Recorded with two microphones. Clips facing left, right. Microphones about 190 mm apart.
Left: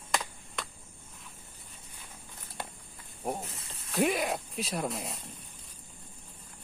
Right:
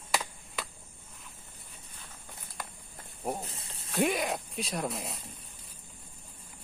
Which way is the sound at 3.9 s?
Centre (ahead or behind).